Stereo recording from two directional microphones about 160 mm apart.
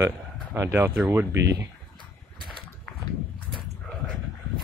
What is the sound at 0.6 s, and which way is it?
Speech, 15° right (ahead or behind).